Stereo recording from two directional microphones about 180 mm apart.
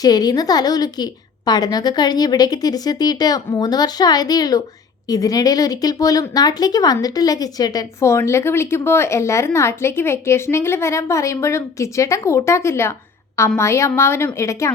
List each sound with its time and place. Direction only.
0.0 s a woman's voice: 20° left (ahead or behind)